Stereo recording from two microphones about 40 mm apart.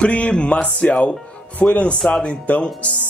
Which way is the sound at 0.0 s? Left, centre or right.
Left.